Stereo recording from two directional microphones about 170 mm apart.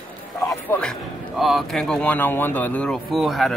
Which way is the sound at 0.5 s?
5° left (ahead or behind).